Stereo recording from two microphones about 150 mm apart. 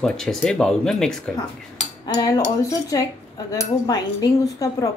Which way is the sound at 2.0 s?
25° left (ahead or behind).